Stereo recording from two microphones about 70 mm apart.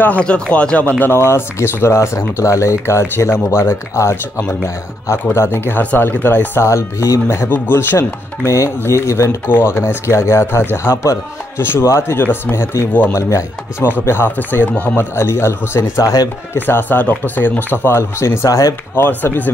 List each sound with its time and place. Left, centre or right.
0.0 s speech: centre
1.1 s speech: left
5.3 s speech: left
6.6 s speech: left
7.2 s speech: left
8.6 s speech: left
9.5 s speech: left
13.8 s speech: left
15.1 s speech: left
16.0 s speech: left
16.5 s speech: left
18.9 s speech: left